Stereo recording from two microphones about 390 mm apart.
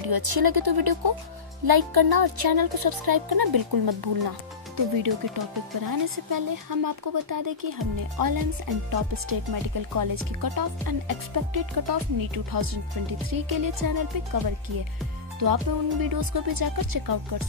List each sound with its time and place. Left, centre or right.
0.0 s speech: right
15.4 s speech: right